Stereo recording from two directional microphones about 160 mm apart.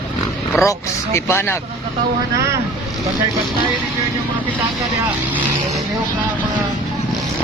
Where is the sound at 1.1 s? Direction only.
15° left (ahead or behind).